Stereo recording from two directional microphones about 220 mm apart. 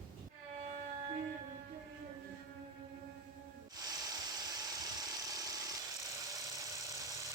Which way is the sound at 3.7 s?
15° right (ahead or behind).